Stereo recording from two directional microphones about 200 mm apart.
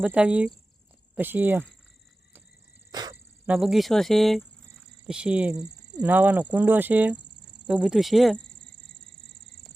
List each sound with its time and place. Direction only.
0.0 s speech: 5° right (ahead or behind)
2.9 s a sound: 20° right (ahead or behind)
3.4 s speech: 5° right (ahead or behind)